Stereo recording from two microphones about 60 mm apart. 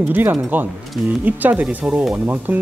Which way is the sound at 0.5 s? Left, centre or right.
Right.